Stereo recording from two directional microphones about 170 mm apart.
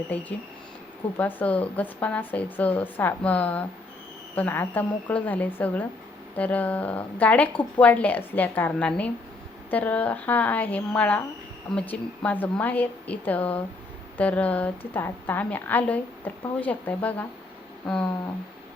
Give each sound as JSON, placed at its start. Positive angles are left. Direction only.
{"t": 0.1, "sound": "speech", "side_deg": 10}